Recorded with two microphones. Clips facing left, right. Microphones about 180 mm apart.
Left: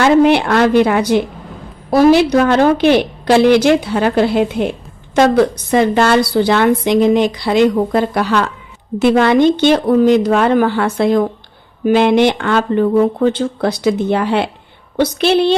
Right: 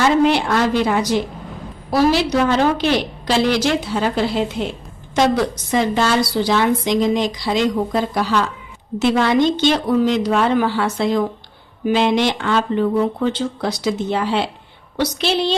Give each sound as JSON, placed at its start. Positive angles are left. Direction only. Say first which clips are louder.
{"t": 0.0, "sound": "a woman's voice", "louder": "left 5 dB", "side_deg": 60}